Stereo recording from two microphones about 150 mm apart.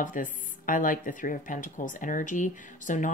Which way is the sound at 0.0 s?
60° left (ahead or behind).